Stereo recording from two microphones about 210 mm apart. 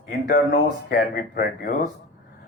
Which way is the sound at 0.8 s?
50° left (ahead or behind).